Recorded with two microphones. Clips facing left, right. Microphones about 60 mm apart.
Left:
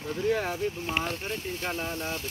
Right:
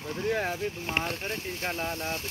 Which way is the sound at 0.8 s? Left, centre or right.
Right.